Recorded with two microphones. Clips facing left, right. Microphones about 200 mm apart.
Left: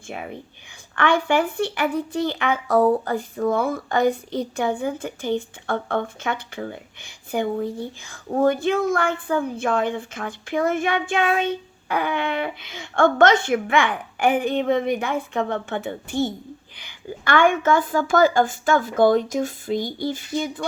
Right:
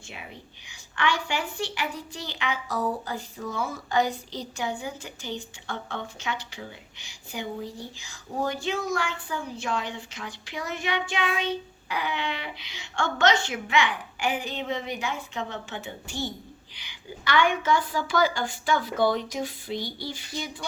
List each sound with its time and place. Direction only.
0.1 s a woman's voice: 50° left (ahead or behind)